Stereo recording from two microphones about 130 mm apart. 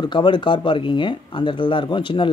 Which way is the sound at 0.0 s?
35° left (ahead or behind).